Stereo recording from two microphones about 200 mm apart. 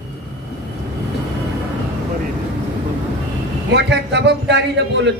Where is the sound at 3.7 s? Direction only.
60° right (ahead or behind).